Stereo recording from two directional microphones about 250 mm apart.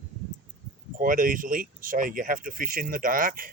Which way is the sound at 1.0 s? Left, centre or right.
Right.